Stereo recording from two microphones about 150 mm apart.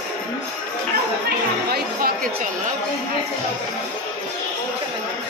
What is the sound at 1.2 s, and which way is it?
Chatter, 85° right.